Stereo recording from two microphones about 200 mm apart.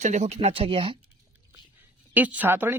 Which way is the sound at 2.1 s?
10° right (ahead or behind).